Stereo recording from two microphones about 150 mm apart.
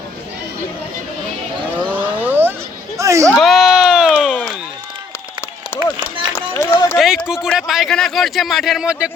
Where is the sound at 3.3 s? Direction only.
Centre (ahead or behind).